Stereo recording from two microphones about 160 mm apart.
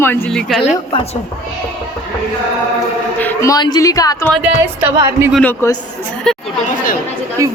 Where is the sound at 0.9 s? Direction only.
35° left (ahead or behind).